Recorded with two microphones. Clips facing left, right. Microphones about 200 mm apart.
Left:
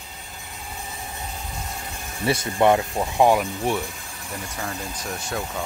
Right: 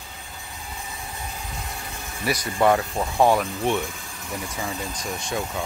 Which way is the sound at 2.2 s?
25° left (ahead or behind).